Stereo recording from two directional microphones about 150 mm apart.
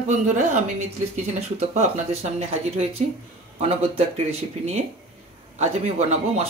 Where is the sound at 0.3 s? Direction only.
55° right (ahead or behind).